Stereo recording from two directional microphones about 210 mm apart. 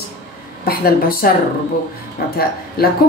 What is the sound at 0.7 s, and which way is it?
Speech, 45° left (ahead or behind).